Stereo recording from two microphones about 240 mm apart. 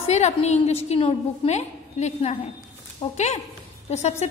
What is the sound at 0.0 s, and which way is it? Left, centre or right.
A woman's voice, left.